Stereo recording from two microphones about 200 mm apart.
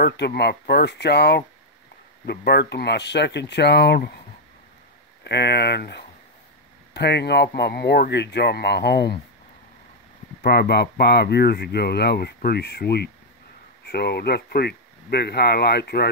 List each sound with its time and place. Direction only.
0.0 s speech: 55° left (ahead or behind)
5.2 s speech: 55° left (ahead or behind)
10.4 s speech: 55° left (ahead or behind)